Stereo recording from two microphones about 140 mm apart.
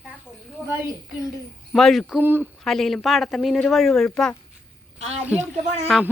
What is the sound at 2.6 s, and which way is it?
Speech, centre (ahead or behind).